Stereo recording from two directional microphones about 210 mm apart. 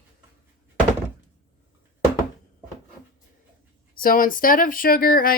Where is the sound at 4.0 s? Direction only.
40° left (ahead or behind).